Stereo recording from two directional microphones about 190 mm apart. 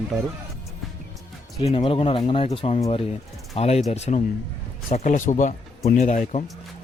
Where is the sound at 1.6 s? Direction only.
30° left (ahead or behind).